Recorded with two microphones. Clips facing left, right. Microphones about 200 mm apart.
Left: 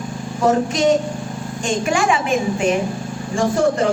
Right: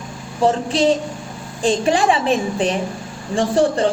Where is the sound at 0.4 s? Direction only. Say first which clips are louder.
Even; 30° right (ahead or behind).